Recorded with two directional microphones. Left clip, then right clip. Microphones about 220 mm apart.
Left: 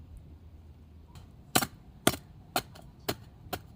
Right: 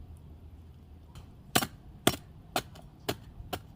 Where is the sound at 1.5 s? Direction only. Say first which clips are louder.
Even; 20° left (ahead or behind).